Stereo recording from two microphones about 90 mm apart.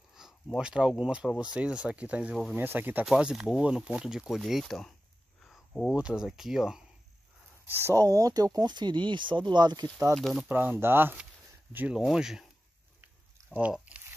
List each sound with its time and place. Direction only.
0.1 s speech: 5° right (ahead or behind); by 3.1 s 20° right (ahead or behind)
3.2 s speech: 10° right (ahead or behind)
5.4 s cricket: 5° left (ahead or behind)
5.9 s speech: 10° right (ahead or behind)
7.8 s speech: 40° right (ahead or behind)
10.1 s speech: centre (ahead or behind)
10.5 s speech: 20° right (ahead or behind)
11.9 s speech: 5° right (ahead or behind)
13.5 s speech: 20° right (ahead or behind)